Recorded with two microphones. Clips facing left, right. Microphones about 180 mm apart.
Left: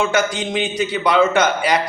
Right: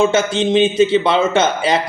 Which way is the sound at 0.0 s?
25° right (ahead or behind).